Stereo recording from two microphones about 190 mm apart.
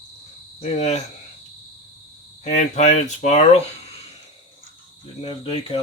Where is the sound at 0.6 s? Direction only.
35° left (ahead or behind).